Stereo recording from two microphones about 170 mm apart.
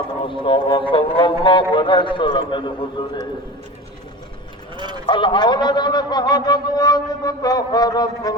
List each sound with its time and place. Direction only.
0.2 s a man's voice: 30° left (ahead or behind)
4.8 s speech: 25° right (ahead or behind)
5.0 s a man's voice: 30° left (ahead or behind)